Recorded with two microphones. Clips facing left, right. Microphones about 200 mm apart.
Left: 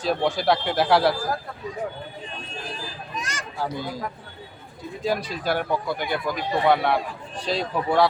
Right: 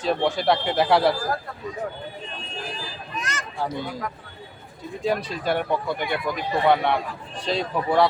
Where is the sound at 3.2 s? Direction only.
10° left (ahead or behind).